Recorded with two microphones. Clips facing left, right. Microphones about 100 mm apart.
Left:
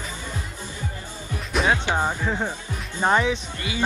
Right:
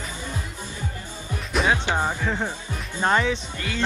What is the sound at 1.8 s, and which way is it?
Speech, 15° left (ahead or behind).